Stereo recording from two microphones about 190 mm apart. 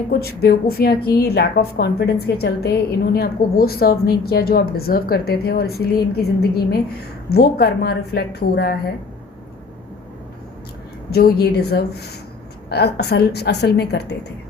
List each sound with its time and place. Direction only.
0.1 s a woman's voice: 55° left (ahead or behind)
11.1 s a woman's voice: 55° left (ahead or behind)